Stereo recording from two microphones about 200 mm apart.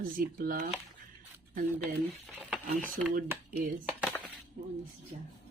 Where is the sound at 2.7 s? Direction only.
45° right (ahead or behind).